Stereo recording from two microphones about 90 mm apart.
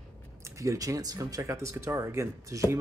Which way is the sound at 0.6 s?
40° right (ahead or behind).